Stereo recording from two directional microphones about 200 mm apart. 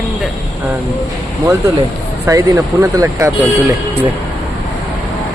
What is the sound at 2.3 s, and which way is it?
Speech, 15° right (ahead or behind).